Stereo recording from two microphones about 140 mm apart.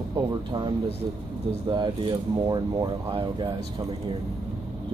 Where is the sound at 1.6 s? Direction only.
30° right (ahead or behind).